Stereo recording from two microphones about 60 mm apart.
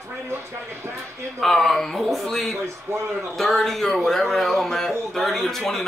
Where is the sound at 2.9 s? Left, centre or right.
Right.